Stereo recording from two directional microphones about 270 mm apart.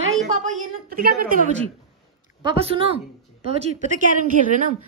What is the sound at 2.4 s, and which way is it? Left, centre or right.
Speech, centre.